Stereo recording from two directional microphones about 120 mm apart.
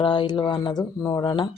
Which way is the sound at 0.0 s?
40° left (ahead or behind).